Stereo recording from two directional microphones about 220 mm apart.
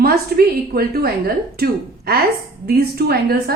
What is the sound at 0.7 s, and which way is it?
A woman's voice, 45° right (ahead or behind).